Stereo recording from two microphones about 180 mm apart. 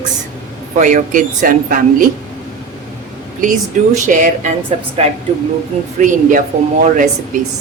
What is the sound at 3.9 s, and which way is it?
Speech, 45° right (ahead or behind).